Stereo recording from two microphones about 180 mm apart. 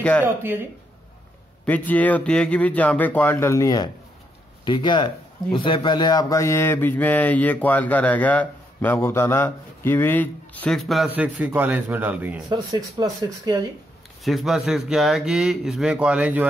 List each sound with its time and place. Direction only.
0.2 s a man's voice: 10° right (ahead or behind)
1.7 s a man's voice: 10° left (ahead or behind); by 12.4 s 10° right (ahead or behind)
12.4 s speech: 25° right (ahead or behind)
14.2 s a man's voice: centre (ahead or behind)